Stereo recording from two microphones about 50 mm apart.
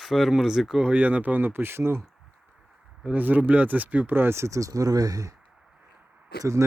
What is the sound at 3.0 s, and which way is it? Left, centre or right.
Speech, right.